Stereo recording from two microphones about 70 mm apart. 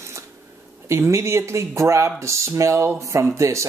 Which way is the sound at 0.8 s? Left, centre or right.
Right.